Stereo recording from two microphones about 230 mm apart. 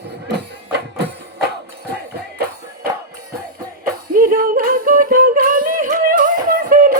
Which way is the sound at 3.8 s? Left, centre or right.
Right.